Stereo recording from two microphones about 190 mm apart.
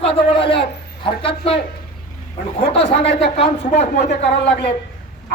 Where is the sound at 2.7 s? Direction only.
30° left (ahead or behind).